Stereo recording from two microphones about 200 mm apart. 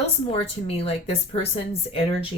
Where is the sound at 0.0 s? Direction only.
30° left (ahead or behind).